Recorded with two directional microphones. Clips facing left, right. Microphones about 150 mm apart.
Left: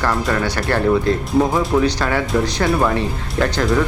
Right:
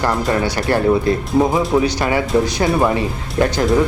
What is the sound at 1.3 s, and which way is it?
Speech, centre (ahead or behind).